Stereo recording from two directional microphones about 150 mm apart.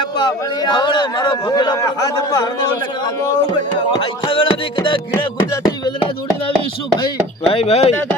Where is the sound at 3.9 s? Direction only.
35° left (ahead or behind).